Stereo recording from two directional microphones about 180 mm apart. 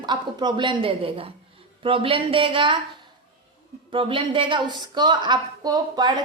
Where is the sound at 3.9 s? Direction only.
30° right (ahead or behind).